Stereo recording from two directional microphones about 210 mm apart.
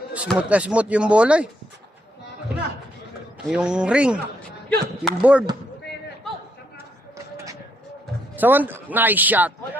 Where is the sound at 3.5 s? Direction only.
5° right (ahead or behind).